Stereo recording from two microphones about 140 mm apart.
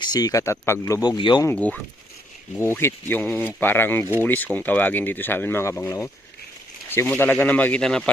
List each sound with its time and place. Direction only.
0.0 s speech: 30° left (ahead or behind)
1.5 s speech: 10° left (ahead or behind)
7.2 s speech: 10° left (ahead or behind)